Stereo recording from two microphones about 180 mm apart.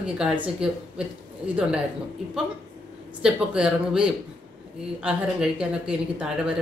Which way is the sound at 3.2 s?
5° right (ahead or behind).